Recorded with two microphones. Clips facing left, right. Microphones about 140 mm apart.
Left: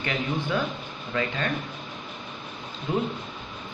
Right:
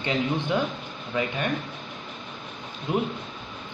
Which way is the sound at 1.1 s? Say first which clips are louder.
Right 1 dB; 15° right (ahead or behind).